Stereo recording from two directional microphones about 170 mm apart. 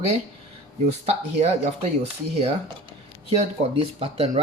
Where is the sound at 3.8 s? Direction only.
35° right (ahead or behind).